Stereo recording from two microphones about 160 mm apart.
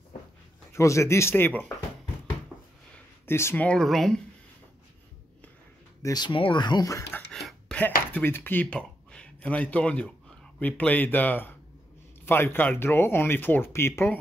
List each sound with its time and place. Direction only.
0.7 s speech: 20° left (ahead or behind)
2.5 s a sound: 10° right (ahead or behind)
3.3 s speech: 15° left (ahead or behind)
6.0 s speech: 25° left (ahead or behind)
7.2 s a sound: centre (ahead or behind)
8.1 s speech: 10° left (ahead or behind)